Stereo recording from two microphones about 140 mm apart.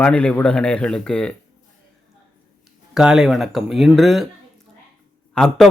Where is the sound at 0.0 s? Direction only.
5° left (ahead or behind).